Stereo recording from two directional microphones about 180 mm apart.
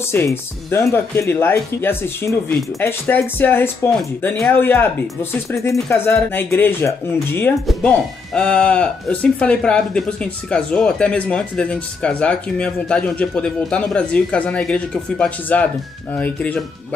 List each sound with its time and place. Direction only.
0.0 s speech: 15° left (ahead or behind)